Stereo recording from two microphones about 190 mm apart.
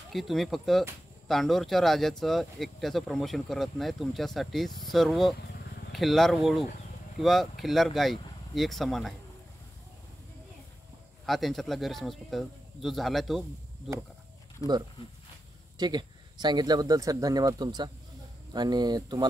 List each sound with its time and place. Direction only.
0.1 s speech: centre (ahead or behind)
11.2 s speech: centre (ahead or behind)
15.8 s speech: 20° right (ahead or behind)